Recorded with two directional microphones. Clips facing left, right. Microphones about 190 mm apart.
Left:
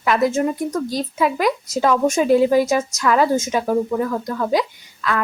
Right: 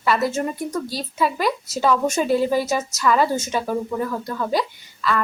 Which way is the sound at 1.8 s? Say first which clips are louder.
Left 3 dB; 10° left (ahead or behind).